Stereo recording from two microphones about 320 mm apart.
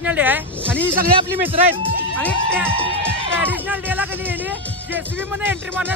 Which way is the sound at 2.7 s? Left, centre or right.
Centre.